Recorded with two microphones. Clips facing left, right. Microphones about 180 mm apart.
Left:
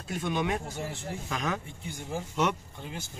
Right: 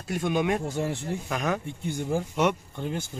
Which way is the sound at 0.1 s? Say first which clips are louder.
Right 5 dB; 15° right (ahead or behind).